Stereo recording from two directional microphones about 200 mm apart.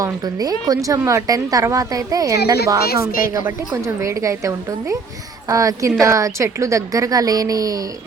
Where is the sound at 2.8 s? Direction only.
50° left (ahead or behind).